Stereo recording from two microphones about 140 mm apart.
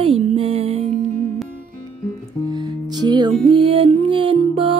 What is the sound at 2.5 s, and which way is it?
Music, 30° right (ahead or behind).